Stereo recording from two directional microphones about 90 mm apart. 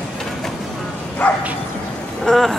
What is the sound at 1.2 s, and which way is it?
Bow-wow, 15° left (ahead or behind).